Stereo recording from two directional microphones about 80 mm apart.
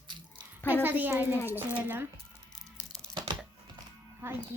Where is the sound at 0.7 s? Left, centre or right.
Right.